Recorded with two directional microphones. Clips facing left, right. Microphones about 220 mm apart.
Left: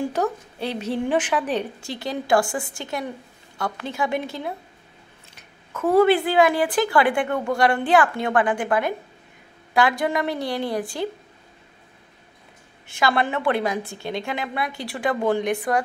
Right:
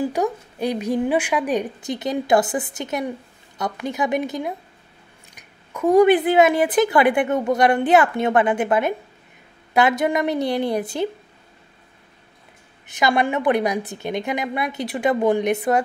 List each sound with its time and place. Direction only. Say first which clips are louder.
0.0 s speech: right 2 dB; 15° right (ahead or behind)
12.8 s speech: right 2 dB; 20° right (ahead or behind)